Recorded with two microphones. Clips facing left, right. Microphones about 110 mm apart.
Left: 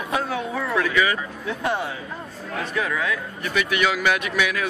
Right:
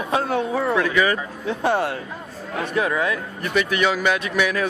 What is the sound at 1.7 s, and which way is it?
Speech, 65° right (ahead or behind).